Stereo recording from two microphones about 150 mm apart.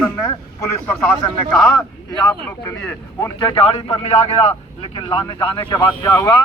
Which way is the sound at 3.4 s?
35° left (ahead or behind).